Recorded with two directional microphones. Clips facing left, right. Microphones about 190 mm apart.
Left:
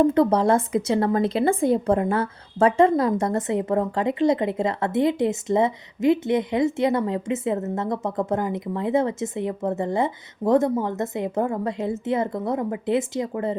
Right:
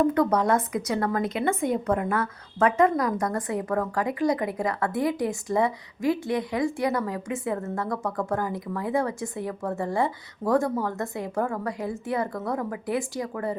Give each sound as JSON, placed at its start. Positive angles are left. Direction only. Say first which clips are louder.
{"t": 0.0, "sound": "speech", "louder": "left 4 dB", "side_deg": 25}